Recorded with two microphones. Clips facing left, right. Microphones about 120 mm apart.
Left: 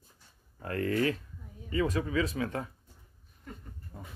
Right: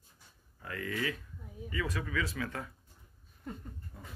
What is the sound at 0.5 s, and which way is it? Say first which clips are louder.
Speech: left 8 dB; 45° left (ahead or behind).